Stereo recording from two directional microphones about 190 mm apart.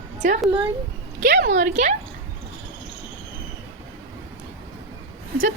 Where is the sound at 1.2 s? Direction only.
50° right (ahead or behind).